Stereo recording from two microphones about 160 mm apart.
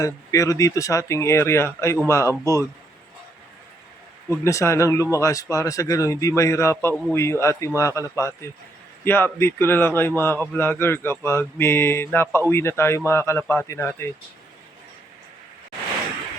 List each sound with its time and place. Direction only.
0.0 s speech: 20° left (ahead or behind)
4.3 s speech: 20° left (ahead or behind)